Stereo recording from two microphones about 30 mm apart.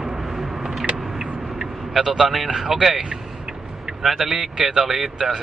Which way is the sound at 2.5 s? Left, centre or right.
Right.